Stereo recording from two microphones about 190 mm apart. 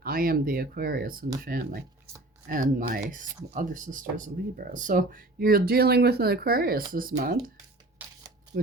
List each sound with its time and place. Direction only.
0.0 s speech: 50° right (ahead or behind)